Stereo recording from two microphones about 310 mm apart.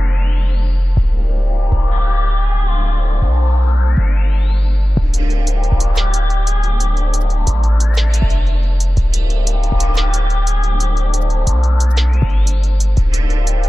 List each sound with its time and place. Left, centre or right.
5.8 s music: centre
9.4 s music: centre